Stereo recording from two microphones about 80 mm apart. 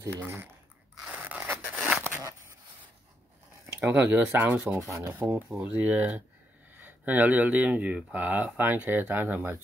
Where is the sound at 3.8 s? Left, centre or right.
Centre.